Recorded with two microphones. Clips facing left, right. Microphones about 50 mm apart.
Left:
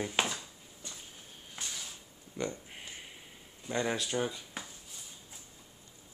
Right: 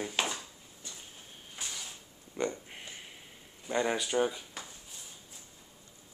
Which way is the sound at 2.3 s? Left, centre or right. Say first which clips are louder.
Right 3 dB; centre.